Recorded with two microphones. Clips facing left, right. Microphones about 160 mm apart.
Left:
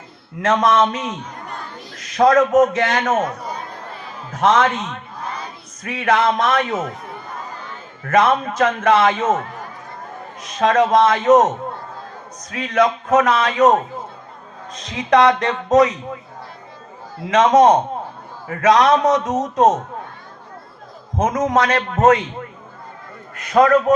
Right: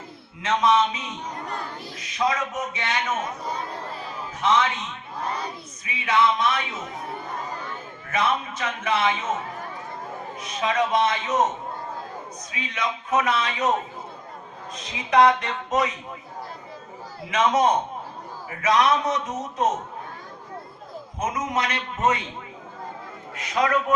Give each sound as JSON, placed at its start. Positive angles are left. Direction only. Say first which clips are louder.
{"t": 0.4, "sound": "a man's voice", "louder": "left 5 dB", "side_deg": 90}
{"t": 4.3, "sound": "a man's voice", "louder": "left 6 dB", "side_deg": 90}
{"t": 8.0, "sound": "a man's voice", "louder": "left 9 dB", "side_deg": 90}
{"t": 10.6, "sound": "a man's voice", "louder": "left 8 dB", "side_deg": 90}
{"t": 17.3, "sound": "a man's voice", "louder": "left 8 dB", "side_deg": 90}
{"t": 21.2, "sound": "a man's voice", "louder": "left 9 dB", "side_deg": 90}
{"t": 23.4, "sound": "a man's voice", "louder": "left 9 dB", "side_deg": 55}